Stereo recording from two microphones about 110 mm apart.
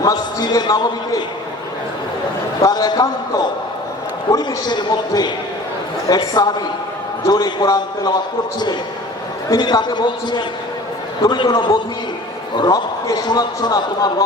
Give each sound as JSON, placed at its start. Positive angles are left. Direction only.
{"t": 0.0, "sound": "a man's voice", "side_deg": 35}
{"t": 2.6, "sound": "a man's voice", "side_deg": 35}